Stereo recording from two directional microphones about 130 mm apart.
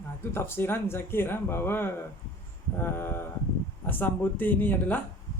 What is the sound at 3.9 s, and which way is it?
Speech, 15° left (ahead or behind).